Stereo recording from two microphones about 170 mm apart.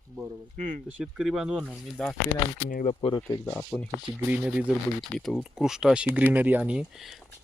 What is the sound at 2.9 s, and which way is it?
Speech, 25° left (ahead or behind).